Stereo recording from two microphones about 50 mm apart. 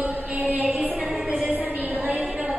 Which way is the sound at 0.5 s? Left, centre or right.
Right.